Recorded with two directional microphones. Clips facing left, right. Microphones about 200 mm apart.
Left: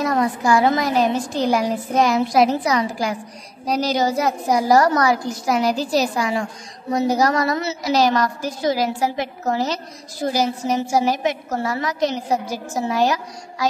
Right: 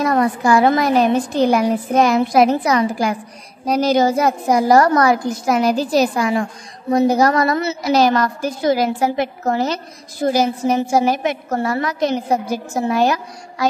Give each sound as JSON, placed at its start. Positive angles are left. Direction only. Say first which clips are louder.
{"t": 0.0, "sound": "a woman's voice", "louder": "right 3 dB", "side_deg": -55}